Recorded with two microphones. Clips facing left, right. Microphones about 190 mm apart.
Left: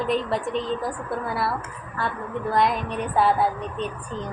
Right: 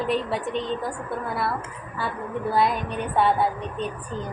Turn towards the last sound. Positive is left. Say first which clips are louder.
# left 1 dB
turn(degrees=0)  # may be behind; listen again after turning